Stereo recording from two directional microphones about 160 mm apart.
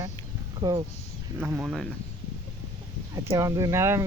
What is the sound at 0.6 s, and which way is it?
Speech, 25° right (ahead or behind).